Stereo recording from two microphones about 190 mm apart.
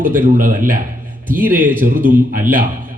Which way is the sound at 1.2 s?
10° right (ahead or behind).